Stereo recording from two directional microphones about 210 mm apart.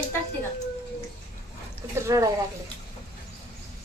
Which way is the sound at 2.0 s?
15° right (ahead or behind).